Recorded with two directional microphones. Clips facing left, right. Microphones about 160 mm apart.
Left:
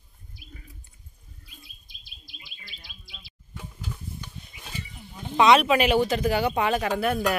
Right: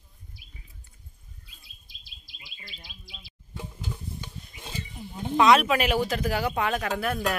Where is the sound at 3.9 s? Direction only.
20° right (ahead or behind).